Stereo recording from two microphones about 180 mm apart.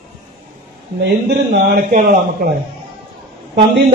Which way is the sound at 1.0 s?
70° right (ahead or behind).